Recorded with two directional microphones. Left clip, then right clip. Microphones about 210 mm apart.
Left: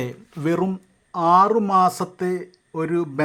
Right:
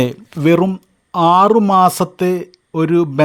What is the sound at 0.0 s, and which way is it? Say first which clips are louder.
Speech: right 11 dB; 30° right (ahead or behind).